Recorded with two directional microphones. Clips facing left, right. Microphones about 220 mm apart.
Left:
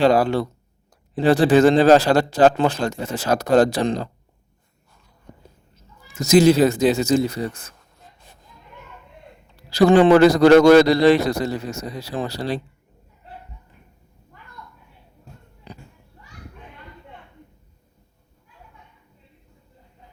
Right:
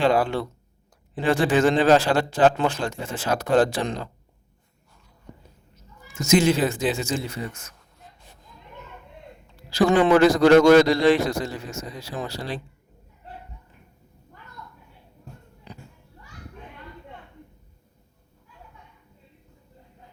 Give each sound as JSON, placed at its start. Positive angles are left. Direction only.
{"t": 0.0, "sound": "a man's voice", "side_deg": 40}
{"t": 6.1, "sound": "a man's voice", "side_deg": 35}
{"t": 9.6, "sound": "a man's voice", "side_deg": 35}